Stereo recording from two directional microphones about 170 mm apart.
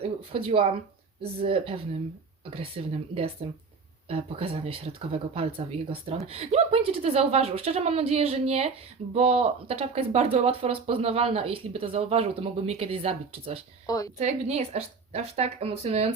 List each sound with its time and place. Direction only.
0.0 s speech: 35° right (ahead or behind)
13.8 s speech: 20° left (ahead or behind)
14.2 s speech: 40° right (ahead or behind)